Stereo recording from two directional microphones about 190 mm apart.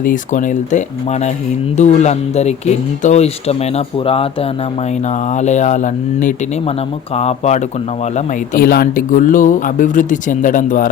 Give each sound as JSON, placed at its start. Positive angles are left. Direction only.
{"t": 0.0, "sound": "speech", "side_deg": 45}
{"t": 8.1, "sound": "speech", "side_deg": 50}